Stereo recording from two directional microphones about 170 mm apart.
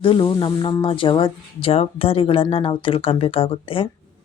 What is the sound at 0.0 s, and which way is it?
Speech, 30° left (ahead or behind).